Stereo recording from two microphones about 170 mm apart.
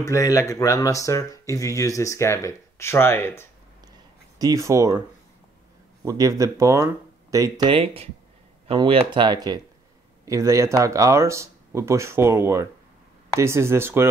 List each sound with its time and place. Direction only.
0.0 s speech: 20° left (ahead or behind)
4.4 s speech: 20° right (ahead or behind)
6.0 s speech: 20° right (ahead or behind)